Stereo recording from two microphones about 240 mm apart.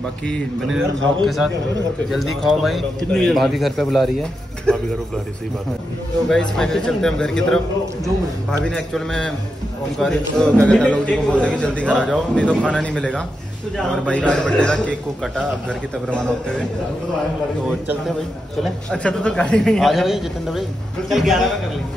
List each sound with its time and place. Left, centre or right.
0.7 s a man's voice: right
1.2 s a man's voice: centre
6.2 s a man's voice: centre
17.6 s a man's voice: centre